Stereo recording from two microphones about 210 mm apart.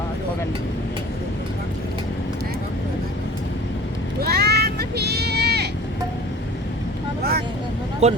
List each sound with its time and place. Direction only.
4.2 s a sound: 50° right (ahead or behind)
7.2 s vehicle: 45° right (ahead or behind)
8.0 s speech: 30° right (ahead or behind)